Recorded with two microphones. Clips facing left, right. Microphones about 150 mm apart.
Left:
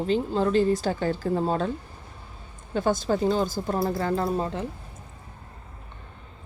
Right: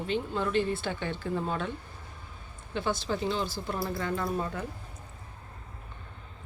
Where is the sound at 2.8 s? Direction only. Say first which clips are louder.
Left 7 dB; 45° left (ahead or behind); by 4.6 s 30° left (ahead or behind).